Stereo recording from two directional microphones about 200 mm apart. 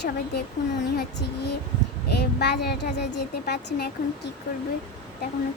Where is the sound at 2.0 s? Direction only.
55° left (ahead or behind).